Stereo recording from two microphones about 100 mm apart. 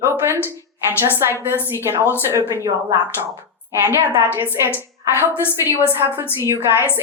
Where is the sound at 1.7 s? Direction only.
25° right (ahead or behind).